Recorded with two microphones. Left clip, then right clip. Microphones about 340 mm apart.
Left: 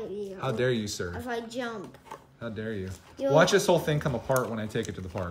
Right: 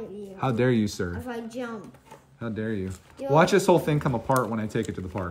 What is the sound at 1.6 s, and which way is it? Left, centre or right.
Speech, left.